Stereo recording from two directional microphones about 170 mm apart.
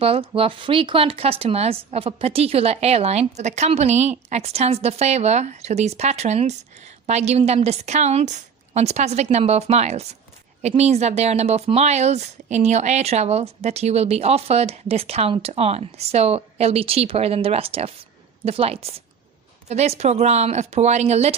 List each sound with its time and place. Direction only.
0.0 s speech: 35° right (ahead or behind)